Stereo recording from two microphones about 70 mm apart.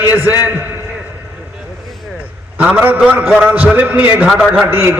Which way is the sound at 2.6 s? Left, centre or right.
Right.